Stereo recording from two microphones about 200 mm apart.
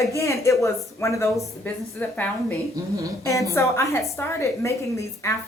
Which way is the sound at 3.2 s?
15° left (ahead or behind).